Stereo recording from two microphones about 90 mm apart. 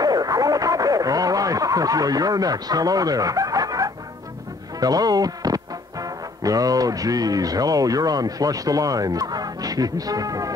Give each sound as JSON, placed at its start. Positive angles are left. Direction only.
{"t": 0.0, "sound": "radio", "side_deg": -45}
{"t": 4.7, "sound": "speech", "side_deg": -45}